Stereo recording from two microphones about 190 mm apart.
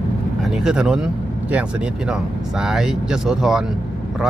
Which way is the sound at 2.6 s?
Centre (ahead or behind).